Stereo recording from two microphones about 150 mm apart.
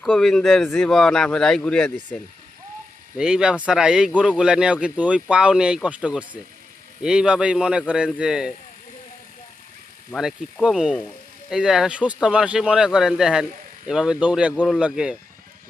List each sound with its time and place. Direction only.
0.0 s speech: centre (ahead or behind)
3.2 s speech: 5° right (ahead or behind)
10.2 s speech: 5° right (ahead or behind)
14.5 s speech: 5° left (ahead or behind)
14.8 s speech: 5° right (ahead or behind)